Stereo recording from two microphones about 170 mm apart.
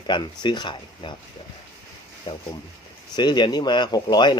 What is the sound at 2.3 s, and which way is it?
Speech, 30° left (ahead or behind).